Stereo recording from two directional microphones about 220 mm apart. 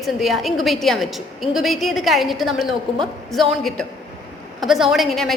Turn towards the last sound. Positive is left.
turn(degrees=0)  # may be behind; listen again after turning